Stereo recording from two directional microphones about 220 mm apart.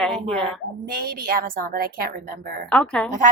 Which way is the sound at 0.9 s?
40° right (ahead or behind).